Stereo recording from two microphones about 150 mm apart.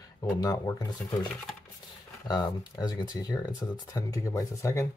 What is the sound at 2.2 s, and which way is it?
Speech, 25° left (ahead or behind).